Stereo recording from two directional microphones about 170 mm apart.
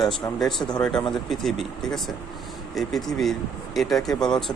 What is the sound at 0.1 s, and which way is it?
Speech, centre (ahead or behind).